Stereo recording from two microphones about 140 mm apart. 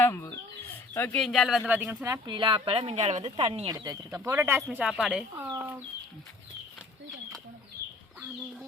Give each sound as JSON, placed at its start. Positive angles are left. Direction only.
{"t": 0.0, "sound": "chicken", "side_deg": 15}
{"t": 0.9, "sound": "speech", "side_deg": 10}
{"t": 1.7, "sound": "speech", "side_deg": -10}
{"t": 2.3, "sound": "speech", "side_deg": -35}
{"t": 3.0, "sound": "a woman's voice", "side_deg": -55}
{"t": 3.2, "sound": "speech", "side_deg": -40}
{"t": 3.7, "sound": "speech", "side_deg": -30}
{"t": 4.3, "sound": "speech", "side_deg": -20}
{"t": 4.8, "sound": "speech", "side_deg": -5}